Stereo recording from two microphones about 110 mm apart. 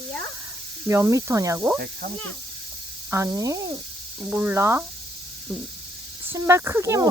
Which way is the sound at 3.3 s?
30° right (ahead or behind).